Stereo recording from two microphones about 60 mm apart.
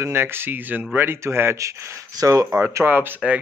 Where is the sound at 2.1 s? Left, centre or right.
Right.